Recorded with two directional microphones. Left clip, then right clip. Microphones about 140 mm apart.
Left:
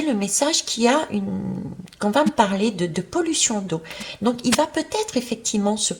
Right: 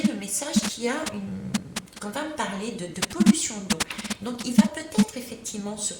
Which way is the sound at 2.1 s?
40° left (ahead or behind).